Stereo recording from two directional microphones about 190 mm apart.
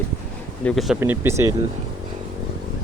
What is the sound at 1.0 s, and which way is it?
Speech, 15° right (ahead or behind).